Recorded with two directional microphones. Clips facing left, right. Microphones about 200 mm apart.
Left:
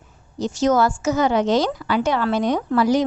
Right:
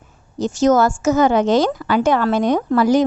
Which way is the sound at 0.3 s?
45° right (ahead or behind).